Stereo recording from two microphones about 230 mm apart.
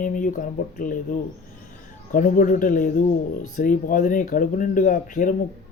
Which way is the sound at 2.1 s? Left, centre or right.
Left.